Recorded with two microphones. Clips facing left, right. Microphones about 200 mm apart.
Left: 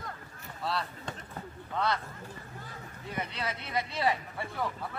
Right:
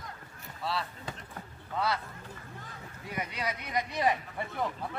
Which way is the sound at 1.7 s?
5° right (ahead or behind).